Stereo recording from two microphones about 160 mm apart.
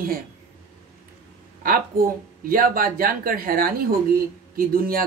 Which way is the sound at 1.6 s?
65° right (ahead or behind).